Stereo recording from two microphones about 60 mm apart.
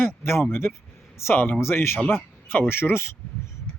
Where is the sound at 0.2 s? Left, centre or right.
Left.